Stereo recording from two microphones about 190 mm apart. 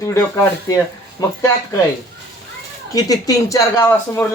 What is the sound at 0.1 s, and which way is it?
Speech, 15° left (ahead or behind).